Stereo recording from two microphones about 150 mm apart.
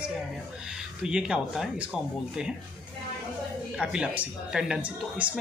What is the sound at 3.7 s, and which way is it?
Speech, 5° right (ahead or behind).